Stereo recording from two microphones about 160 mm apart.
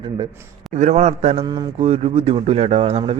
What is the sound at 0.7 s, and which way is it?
A man's voice, 45° right (ahead or behind).